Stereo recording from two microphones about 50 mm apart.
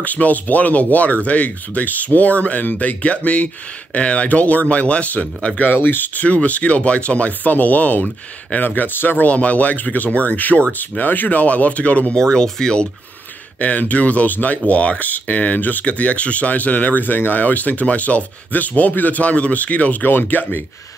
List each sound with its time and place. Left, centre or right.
0.0 s speech: left
9.3 s speech: left
12.2 s speech: centre
13.6 s speech: left